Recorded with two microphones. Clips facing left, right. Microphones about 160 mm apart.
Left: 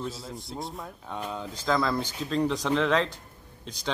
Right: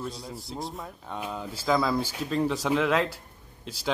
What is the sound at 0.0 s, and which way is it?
Speech, centre (ahead or behind).